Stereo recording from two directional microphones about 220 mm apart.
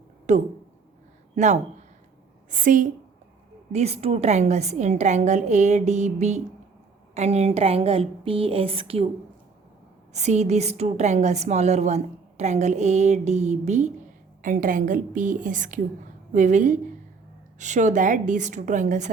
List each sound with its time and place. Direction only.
0.3 s a woman's voice: 30° right (ahead or behind)
2.5 s a woman's voice: 35° right (ahead or behind)
10.1 s a woman's voice: 30° right (ahead or behind)